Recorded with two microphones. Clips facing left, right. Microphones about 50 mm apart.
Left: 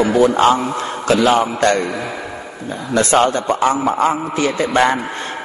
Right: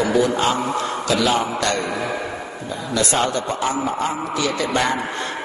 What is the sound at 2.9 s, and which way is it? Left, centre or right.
A man's voice, left.